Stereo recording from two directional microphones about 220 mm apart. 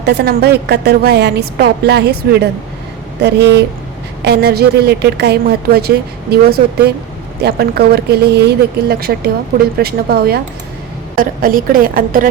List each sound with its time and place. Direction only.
0.0 s a woman's voice: 45° right (ahead or behind)